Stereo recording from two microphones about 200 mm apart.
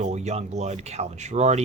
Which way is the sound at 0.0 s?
35° right (ahead or behind).